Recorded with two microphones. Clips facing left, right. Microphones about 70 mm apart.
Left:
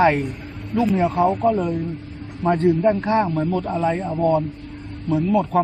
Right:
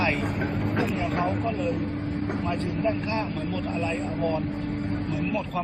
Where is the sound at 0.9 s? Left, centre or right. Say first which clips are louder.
Left 8 dB; left.